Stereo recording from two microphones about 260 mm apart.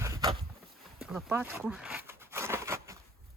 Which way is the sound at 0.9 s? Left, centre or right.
Centre.